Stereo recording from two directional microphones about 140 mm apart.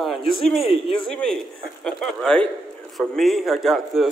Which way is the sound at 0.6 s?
40° left (ahead or behind).